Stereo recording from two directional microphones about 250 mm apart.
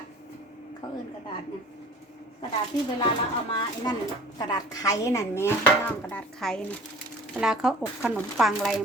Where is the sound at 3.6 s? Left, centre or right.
Centre.